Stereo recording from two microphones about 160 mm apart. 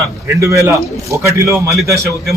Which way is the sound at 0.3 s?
20° right (ahead or behind).